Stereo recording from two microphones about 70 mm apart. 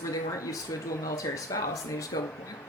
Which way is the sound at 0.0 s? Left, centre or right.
Left.